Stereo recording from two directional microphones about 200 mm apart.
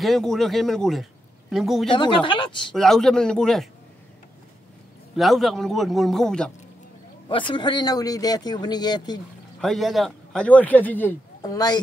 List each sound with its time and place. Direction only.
0.0 s a man's voice: centre (ahead or behind)
2.0 s speech: 25° left (ahead or behind)
2.7 s a man's voice: centre (ahead or behind)
5.1 s a man's voice: centre (ahead or behind)
7.2 s speech: 25° left (ahead or behind)
9.6 s a man's voice: centre (ahead or behind); by 11.8 s 20° left (ahead or behind)